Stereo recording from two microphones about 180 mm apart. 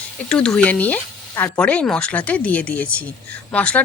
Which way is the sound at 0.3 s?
5° left (ahead or behind).